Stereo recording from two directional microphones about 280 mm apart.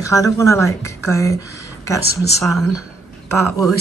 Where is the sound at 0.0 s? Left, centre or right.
Centre.